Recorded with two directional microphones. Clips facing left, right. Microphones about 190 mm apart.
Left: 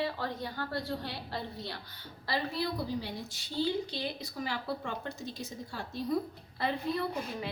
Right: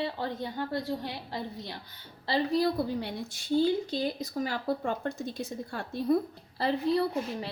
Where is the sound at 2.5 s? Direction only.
45° right (ahead or behind).